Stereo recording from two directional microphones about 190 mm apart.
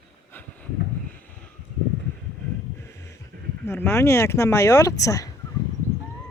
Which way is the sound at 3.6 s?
10° left (ahead or behind).